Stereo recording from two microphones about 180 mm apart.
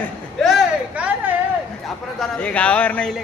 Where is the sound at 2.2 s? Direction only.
5° left (ahead or behind).